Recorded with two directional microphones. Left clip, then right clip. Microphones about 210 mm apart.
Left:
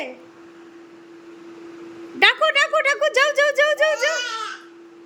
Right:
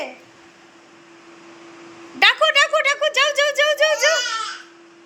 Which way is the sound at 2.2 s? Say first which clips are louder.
Right 2 dB; 15° left (ahead or behind).